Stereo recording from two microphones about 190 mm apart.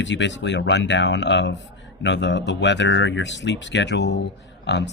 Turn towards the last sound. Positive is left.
turn(degrees=65)  # may be behind; listen again after turning